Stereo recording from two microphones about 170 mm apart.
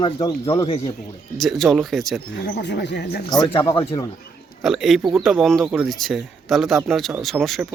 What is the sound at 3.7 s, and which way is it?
Speech, 35° left (ahead or behind).